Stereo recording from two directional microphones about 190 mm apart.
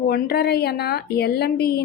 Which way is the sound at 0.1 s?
55° left (ahead or behind).